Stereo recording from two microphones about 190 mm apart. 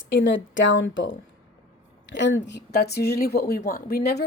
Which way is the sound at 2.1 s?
70° left (ahead or behind).